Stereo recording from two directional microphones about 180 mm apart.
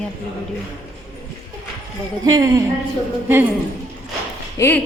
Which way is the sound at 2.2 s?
20° right (ahead or behind).